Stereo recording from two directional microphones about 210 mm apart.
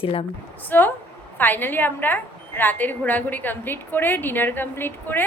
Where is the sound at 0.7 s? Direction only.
10° left (ahead or behind).